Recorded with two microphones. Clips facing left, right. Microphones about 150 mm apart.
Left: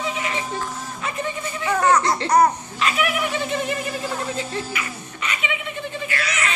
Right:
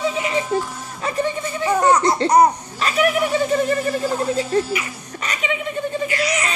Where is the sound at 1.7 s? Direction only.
20° right (ahead or behind).